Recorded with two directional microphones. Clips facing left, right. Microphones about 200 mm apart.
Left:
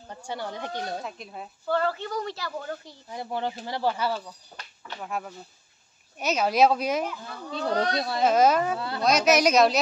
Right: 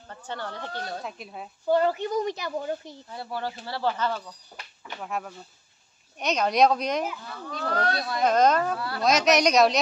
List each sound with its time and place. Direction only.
0.1 s speech: 10° left (ahead or behind)
1.0 s speech: centre (ahead or behind)
1.7 s a woman's voice: 15° right (ahead or behind)
3.1 s speech: 20° left (ahead or behind)
5.0 s speech: centre (ahead or behind)
7.5 s speech: 20° left (ahead or behind)
8.2 s speech: 5° left (ahead or behind)
8.7 s speech: 20° left (ahead or behind)
9.0 s speech: centre (ahead or behind)